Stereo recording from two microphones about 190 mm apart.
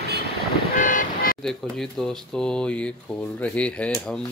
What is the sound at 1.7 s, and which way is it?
Speech, centre (ahead or behind).